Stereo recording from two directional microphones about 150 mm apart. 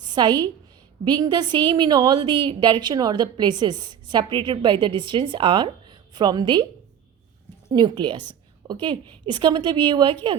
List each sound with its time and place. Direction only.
0.0 s a woman's voice: 30° right (ahead or behind)
7.7 s a woman's voice: 30° right (ahead or behind)